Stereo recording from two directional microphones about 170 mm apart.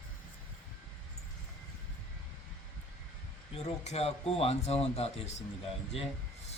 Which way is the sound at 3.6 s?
40° left (ahead or behind).